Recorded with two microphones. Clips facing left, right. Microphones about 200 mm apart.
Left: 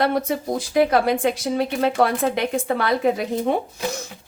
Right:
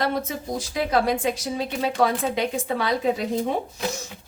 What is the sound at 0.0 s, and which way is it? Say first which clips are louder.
A woman's voice: left 5 dB; 60° left (ahead or behind).